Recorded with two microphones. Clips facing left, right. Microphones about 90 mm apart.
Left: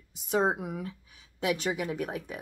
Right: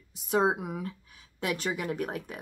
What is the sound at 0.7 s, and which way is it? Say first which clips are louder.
Speech: right 1 dB; 45° right (ahead or behind).